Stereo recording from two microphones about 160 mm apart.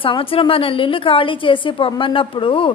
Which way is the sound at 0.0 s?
35° left (ahead or behind).